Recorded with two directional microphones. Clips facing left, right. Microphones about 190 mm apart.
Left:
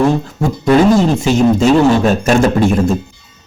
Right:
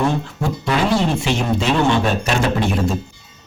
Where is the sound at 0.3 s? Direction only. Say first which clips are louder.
Left 9 dB; 45° left (ahead or behind).